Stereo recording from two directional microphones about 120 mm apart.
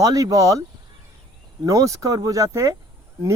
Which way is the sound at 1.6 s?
30° right (ahead or behind).